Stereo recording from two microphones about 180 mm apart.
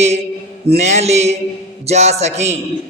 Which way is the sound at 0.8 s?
40° right (ahead or behind).